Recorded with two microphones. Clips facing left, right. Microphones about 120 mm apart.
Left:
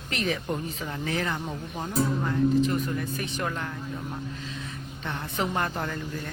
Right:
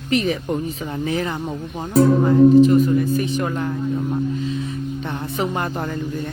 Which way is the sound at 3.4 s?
20° right (ahead or behind).